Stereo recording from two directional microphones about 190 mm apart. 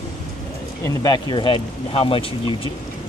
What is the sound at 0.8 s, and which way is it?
Speech, 20° left (ahead or behind).